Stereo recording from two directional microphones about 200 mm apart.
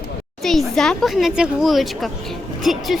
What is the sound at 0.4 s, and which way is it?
A woman's voice, centre (ahead or behind).